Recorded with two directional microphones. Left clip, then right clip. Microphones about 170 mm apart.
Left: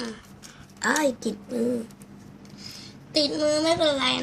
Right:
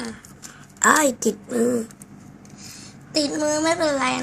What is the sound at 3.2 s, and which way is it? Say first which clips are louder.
Speech: right 2 dB; 5° left (ahead or behind).